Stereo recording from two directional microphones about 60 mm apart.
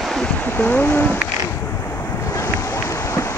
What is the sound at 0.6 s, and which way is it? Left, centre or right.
Speech, left.